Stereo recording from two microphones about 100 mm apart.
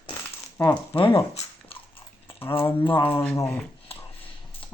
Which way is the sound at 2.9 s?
55° left (ahead or behind).